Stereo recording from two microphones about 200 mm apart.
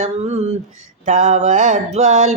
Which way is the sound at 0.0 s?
30° right (ahead or behind).